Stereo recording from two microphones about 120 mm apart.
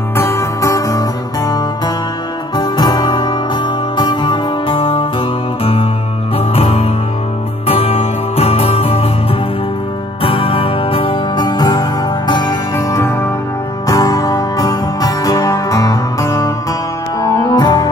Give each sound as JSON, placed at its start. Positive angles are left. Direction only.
{"t": 0.2, "sound": "music", "side_deg": 20}
{"t": 2.5, "sound": "music", "side_deg": 35}
{"t": 6.3, "sound": "music", "side_deg": 55}
{"t": 10.2, "sound": "music", "side_deg": 50}
{"t": 12.7, "sound": "music", "side_deg": 20}